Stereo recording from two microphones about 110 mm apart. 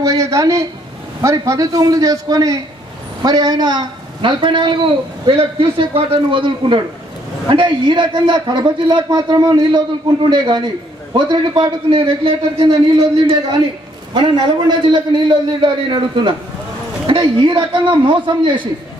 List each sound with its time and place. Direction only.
0.0 s a sound: 30° right (ahead or behind)
1.2 s a man's voice: 30° right (ahead or behind); by 12.7 s 55° right (ahead or behind)
14.1 s a man's voice: 45° right (ahead or behind)